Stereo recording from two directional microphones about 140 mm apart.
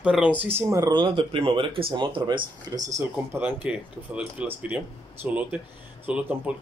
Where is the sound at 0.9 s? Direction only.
35° right (ahead or behind).